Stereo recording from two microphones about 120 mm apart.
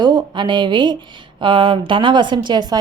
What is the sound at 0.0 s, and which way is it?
A woman's voice, 40° right (ahead or behind).